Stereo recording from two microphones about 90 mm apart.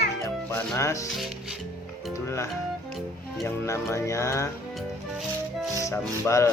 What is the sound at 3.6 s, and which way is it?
Music, 35° left (ahead or behind).